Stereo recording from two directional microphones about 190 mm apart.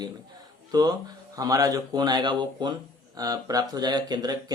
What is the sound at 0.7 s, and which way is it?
Speech, 20° right (ahead or behind).